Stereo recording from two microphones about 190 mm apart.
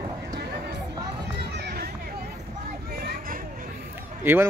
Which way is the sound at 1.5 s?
60° right (ahead or behind).